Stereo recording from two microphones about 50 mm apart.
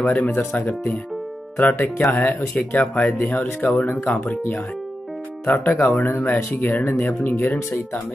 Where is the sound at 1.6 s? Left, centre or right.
Left.